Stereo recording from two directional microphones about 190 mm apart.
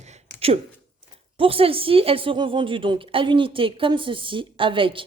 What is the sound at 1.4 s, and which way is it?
A woman's voice, 30° right (ahead or behind).